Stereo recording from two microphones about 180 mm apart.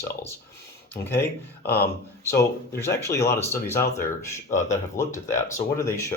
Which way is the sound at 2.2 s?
15° left (ahead or behind).